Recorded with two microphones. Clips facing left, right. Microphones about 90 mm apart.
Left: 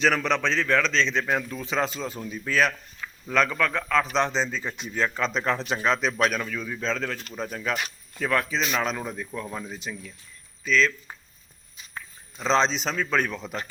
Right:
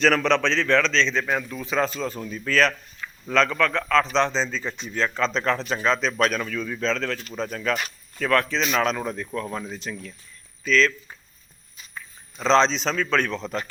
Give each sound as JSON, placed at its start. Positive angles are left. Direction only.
{"t": 0.0, "sound": "speech", "side_deg": 10}
{"t": 1.5, "sound": "speech", "side_deg": 25}
{"t": 12.4, "sound": "speech", "side_deg": 10}